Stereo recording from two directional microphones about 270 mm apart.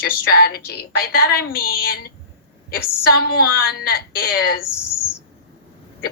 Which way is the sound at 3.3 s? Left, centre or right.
Left.